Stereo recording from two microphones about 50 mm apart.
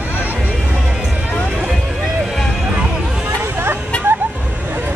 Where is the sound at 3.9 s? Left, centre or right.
Left.